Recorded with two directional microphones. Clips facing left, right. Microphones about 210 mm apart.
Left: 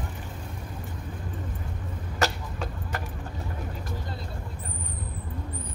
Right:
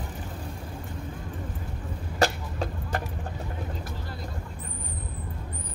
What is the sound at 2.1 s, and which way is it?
Vehicle, 35° right (ahead or behind).